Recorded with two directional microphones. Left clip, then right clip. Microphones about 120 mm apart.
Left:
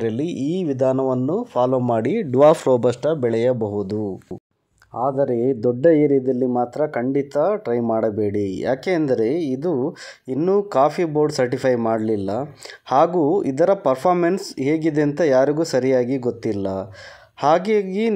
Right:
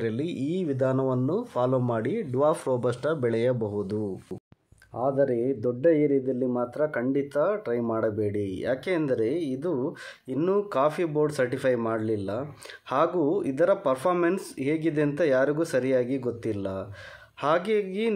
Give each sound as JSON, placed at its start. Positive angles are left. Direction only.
{"t": 0.0, "sound": "speech", "side_deg": 45}
{"t": 4.9, "sound": "speech", "side_deg": 25}
{"t": 5.3, "sound": "speech", "side_deg": 45}